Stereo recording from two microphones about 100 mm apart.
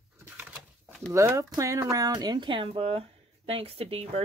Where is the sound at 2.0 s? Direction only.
45° right (ahead or behind).